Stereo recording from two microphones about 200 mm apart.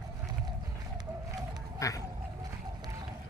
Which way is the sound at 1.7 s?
15° left (ahead or behind).